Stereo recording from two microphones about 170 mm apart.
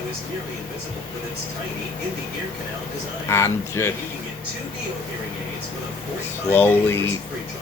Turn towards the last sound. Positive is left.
turn(degrees=15)  # may be behind; listen again after turning